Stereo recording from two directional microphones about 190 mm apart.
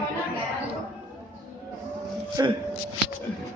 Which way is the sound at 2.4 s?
20° right (ahead or behind).